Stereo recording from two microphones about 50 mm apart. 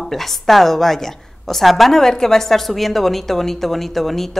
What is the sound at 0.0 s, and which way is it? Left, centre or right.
A woman's voice, centre.